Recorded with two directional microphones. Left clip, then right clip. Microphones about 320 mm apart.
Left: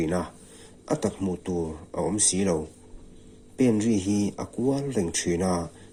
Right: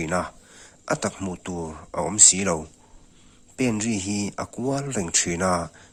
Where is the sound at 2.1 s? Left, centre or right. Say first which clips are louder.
Right 10 dB; right.